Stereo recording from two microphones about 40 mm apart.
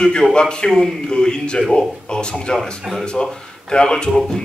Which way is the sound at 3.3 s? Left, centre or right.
Left.